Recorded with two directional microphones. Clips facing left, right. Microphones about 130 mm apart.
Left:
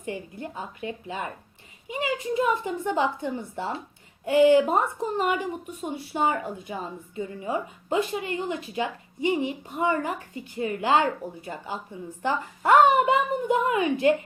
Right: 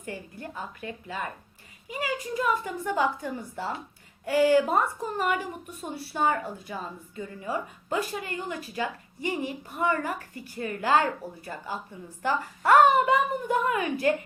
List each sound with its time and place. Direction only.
0.0 s a woman's voice: 20° left (ahead or behind)